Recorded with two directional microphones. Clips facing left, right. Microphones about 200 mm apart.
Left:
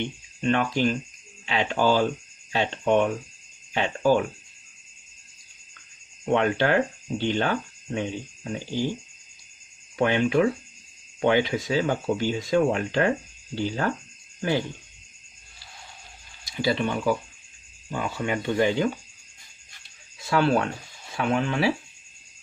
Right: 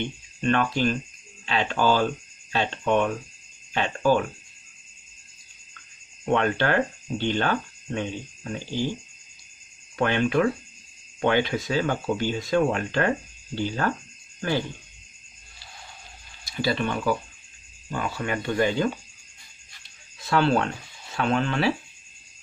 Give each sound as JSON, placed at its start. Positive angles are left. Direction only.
{"t": 0.4, "sound": "speech", "side_deg": 15}
{"t": 6.2, "sound": "speech", "side_deg": 15}
{"t": 9.9, "sound": "speech", "side_deg": 15}
{"t": 16.4, "sound": "speech", "side_deg": 15}
{"t": 20.2, "sound": "speech", "side_deg": 10}